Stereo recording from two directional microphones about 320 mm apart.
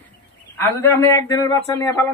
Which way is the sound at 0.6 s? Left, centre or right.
Centre.